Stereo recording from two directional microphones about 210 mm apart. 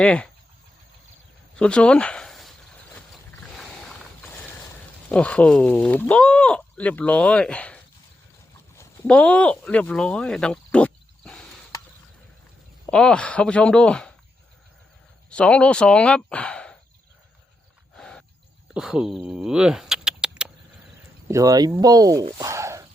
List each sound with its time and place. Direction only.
0.0 s speech: 5° left (ahead or behind)
1.5 s a sound: 5° left (ahead or behind)
3.4 s mechanisms: centre (ahead or behind)
5.0 s speech: 5° left (ahead or behind)
8.8 s speech: 5° left (ahead or behind)
12.8 s speech: 5° left (ahead or behind)
15.3 s speech: 5° left (ahead or behind)
17.9 s wild animals: 5° left (ahead or behind)
18.7 s speech: 5° right (ahead or behind)
21.2 s speech: 15° right (ahead or behind)